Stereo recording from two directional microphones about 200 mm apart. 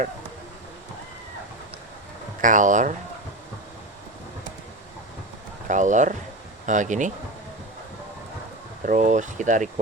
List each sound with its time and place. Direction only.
2.4 s speech: 40° right (ahead or behind)
5.6 s speech: 40° right (ahead or behind)
8.9 s speech: 40° right (ahead or behind)